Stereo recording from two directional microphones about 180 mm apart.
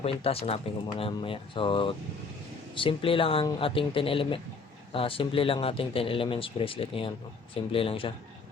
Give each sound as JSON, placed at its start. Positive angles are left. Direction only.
{"t": 0.0, "sound": "speech", "side_deg": 30}